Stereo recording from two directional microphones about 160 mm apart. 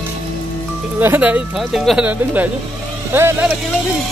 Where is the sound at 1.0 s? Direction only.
10° right (ahead or behind).